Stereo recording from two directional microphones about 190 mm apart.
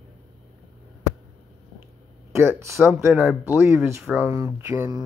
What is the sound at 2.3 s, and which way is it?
Speech, 15° right (ahead or behind).